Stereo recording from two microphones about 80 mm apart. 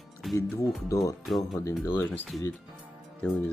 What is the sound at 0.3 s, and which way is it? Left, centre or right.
Speech, left.